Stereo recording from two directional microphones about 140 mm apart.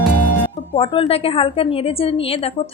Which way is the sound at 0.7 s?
40° left (ahead or behind).